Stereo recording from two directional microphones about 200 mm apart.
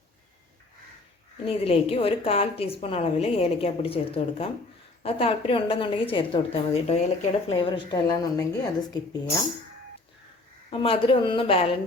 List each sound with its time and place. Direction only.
1.5 s a woman's voice: 30° left (ahead or behind)
10.7 s a woman's voice: 25° left (ahead or behind)